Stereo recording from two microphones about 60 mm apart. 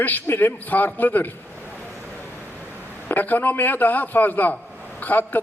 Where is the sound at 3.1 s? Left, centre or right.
Left.